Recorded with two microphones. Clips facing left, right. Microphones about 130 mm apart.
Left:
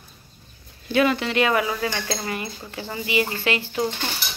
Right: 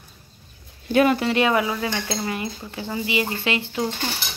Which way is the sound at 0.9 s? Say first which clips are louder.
Right 2 dB; 40° right (ahead or behind).